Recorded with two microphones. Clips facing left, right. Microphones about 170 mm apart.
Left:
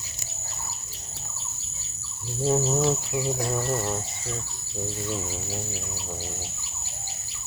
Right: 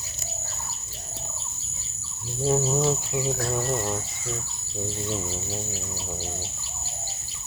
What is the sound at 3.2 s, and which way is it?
Speech, 15° left (ahead or behind).